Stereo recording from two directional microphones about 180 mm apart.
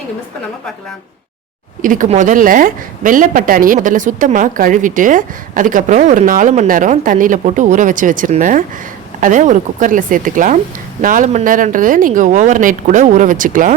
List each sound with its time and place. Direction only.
1.8 s a woman's voice: 45° right (ahead or behind)